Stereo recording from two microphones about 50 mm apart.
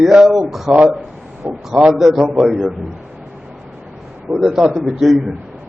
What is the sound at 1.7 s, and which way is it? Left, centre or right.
A man's voice, centre.